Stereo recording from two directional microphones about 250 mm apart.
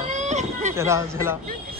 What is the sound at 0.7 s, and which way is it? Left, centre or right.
Speech, centre.